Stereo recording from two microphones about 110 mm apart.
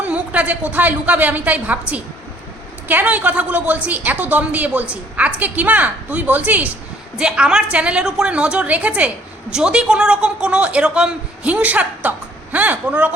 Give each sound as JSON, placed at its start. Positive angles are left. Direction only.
{"t": 0.0, "sound": "a woman's voice", "side_deg": -15}